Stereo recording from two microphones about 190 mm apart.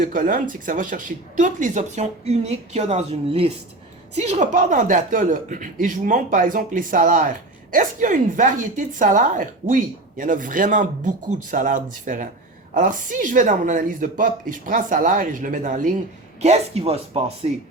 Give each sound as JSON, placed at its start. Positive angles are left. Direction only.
{"t": 0.0, "sound": "speech", "side_deg": -45}